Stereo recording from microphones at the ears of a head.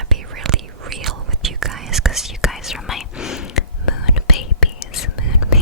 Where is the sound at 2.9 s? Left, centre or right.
Left.